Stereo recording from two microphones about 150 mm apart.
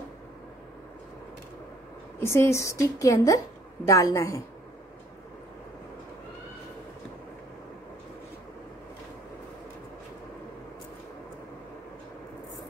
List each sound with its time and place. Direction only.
2.1 s a woman's voice: 15° left (ahead or behind)